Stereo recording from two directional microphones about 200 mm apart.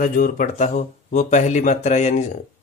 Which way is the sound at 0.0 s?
45° left (ahead or behind).